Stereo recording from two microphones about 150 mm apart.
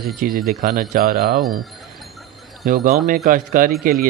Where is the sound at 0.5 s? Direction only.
70° right (ahead or behind).